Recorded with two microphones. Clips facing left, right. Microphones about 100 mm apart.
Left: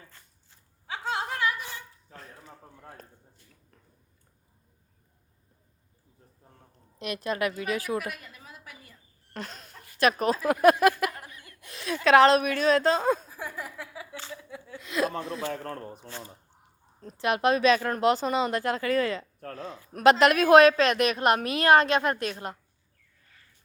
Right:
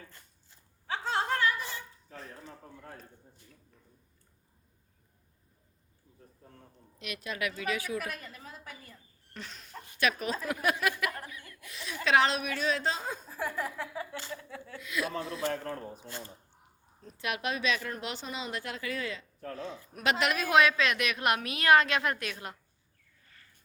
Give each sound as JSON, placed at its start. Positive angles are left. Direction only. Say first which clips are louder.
{"t": 0.9, "sound": "a sound", "louder": "right 1 dB", "side_deg": 10}
{"t": 7.0, "sound": "a woman's voice", "louder": "left 7 dB", "side_deg": 40}
{"t": 8.0, "sound": "a sound", "louder": "left 2 dB", "side_deg": 5}
{"t": 9.3, "sound": "a sound", "louder": "left 7 dB", "side_deg": 45}
{"t": 10.0, "sound": "a woman's voice", "louder": "left 7 dB", "side_deg": 40}
{"t": 10.5, "sound": "speech", "louder": "left 11 dB", "side_deg": 50}
{"t": 11.4, "sound": "chuckle", "louder": "left 1 dB", "side_deg": 30}
{"t": 12.0, "sound": "a woman's voice", "louder": "left 8 dB", "side_deg": 50}
{"t": 13.7, "sound": "a sound", "louder": "right 2 dB", "side_deg": 5}
{"t": 14.8, "sound": "a woman's voice", "louder": "left 6 dB", "side_deg": 40}
{"t": 15.1, "sound": "a man's voice", "louder": "left 1 dB", "side_deg": 60}
{"t": 17.0, "sound": "a woman's voice", "louder": "left 9 dB", "side_deg": 40}